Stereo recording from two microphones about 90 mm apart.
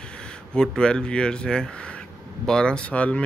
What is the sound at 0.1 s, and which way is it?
Speech, 10° left (ahead or behind).